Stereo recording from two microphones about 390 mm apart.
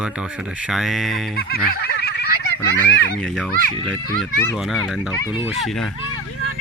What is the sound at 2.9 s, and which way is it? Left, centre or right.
Speech, left.